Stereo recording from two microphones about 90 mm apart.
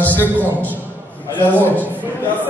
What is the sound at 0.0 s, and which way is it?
A man's voice, 20° left (ahead or behind).